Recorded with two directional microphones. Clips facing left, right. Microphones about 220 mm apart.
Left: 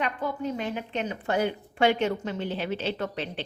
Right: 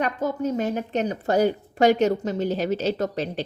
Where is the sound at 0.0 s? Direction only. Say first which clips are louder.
Right 5 dB; 45° right (ahead or behind).